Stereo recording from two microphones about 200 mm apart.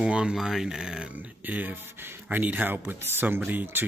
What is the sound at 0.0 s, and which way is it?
Speech, 5° right (ahead or behind).